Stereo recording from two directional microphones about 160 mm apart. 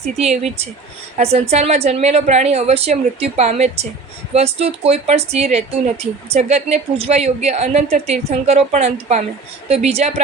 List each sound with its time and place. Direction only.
0.2 s a woman's voice: 45° right (ahead or behind)